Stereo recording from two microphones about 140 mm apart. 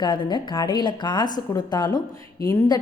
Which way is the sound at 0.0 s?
35° left (ahead or behind).